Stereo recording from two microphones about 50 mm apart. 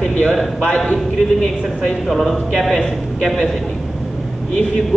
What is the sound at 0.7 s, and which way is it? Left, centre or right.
Speech, centre.